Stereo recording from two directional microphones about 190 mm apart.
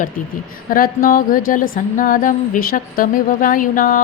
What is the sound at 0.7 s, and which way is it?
A woman's voice, 50° left (ahead or behind).